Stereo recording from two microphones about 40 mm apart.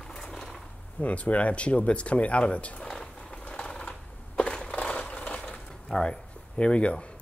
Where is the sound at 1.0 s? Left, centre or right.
Left.